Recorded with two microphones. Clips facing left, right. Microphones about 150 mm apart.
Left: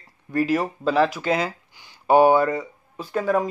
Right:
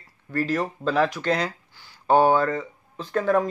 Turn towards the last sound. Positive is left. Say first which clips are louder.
# even
turn(degrees=10)  # may be behind; listen again after turning